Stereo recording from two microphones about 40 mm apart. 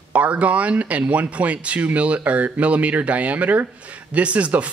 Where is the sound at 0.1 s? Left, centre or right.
Right.